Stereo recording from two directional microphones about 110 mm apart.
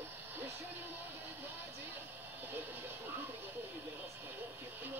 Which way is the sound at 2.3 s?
15° right (ahead or behind).